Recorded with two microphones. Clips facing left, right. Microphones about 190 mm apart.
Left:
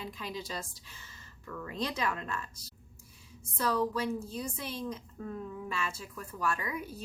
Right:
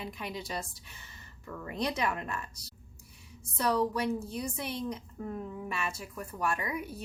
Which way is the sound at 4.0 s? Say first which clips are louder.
Right 2 dB; 65° right (ahead or behind).